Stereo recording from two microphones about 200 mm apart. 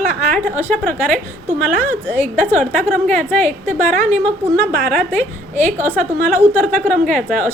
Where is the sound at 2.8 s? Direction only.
5° right (ahead or behind).